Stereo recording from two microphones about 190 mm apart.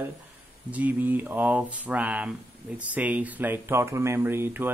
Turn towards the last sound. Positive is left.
turn(degrees=-10)  # may be behind; listen again after turning